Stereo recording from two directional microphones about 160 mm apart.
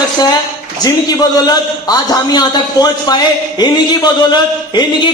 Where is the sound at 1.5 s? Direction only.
25° left (ahead or behind).